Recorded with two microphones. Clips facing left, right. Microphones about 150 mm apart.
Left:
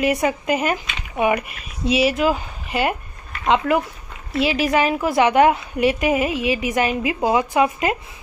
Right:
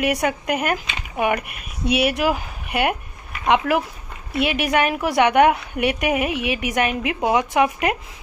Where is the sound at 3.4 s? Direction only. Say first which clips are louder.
Left 1 dB; 5° right (ahead or behind).